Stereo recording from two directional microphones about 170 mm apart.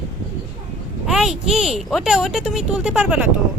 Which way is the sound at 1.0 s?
5° right (ahead or behind).